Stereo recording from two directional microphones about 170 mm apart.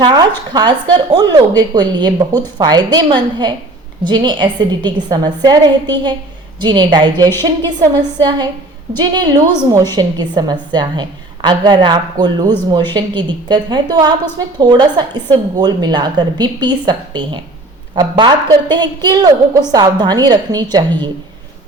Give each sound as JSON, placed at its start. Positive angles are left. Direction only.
{"t": 0.0, "sound": "speech", "side_deg": -25}
{"t": 9.0, "sound": "speech", "side_deg": -25}